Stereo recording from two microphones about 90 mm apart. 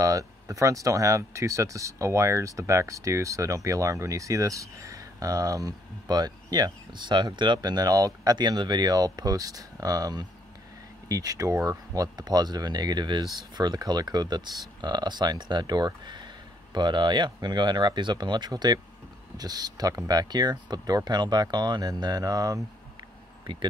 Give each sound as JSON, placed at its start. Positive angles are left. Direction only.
{"t": 0.0, "sound": "speech", "side_deg": -40}
{"t": 23.4, "sound": "speech", "side_deg": -60}